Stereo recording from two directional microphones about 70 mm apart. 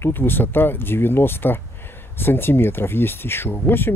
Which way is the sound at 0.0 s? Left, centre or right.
Left.